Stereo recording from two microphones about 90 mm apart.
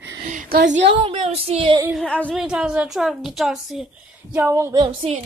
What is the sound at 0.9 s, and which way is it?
Child singing, 80° right.